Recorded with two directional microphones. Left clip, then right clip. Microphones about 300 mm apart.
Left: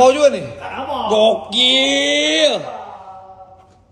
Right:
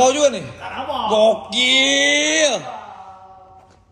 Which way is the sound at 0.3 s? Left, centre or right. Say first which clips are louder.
Left 4 dB; centre.